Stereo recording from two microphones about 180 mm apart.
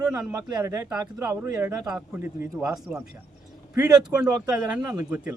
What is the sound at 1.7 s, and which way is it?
A man's voice, 20° right (ahead or behind).